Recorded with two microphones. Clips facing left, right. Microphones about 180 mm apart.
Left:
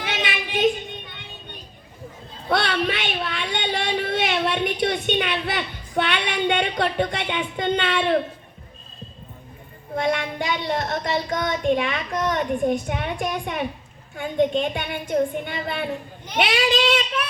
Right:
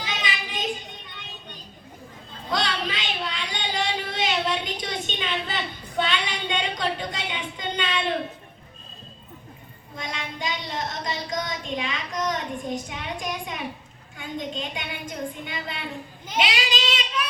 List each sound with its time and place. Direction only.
0.0 s child singing: 65° left (ahead or behind)
2.5 s a sound: 60° left (ahead or behind)
9.9 s speech: 60° left (ahead or behind)